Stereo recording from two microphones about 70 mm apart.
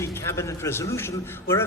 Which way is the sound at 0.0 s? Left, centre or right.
Left.